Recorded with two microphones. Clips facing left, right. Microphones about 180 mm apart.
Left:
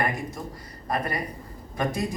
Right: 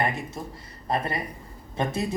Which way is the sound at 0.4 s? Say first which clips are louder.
Even; 25° right (ahead or behind).